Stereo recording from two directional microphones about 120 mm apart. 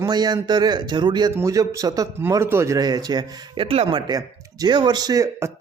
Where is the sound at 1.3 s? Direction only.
25° right (ahead or behind).